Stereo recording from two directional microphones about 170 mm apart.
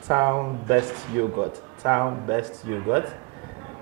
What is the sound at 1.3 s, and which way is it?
A man's voice, 30° right (ahead or behind).